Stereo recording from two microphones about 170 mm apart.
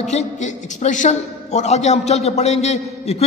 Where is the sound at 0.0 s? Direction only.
40° left (ahead or behind).